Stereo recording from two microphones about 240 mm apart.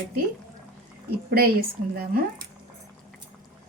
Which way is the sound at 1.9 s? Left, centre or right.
Right.